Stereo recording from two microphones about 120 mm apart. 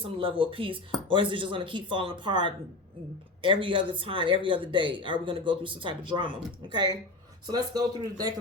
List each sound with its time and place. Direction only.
0.0 s speech: 50° right (ahead or behind)